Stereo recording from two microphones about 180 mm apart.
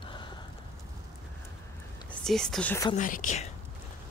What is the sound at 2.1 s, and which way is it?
Speech, 5° left (ahead or behind).